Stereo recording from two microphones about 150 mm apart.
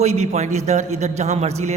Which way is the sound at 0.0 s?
45° right (ahead or behind).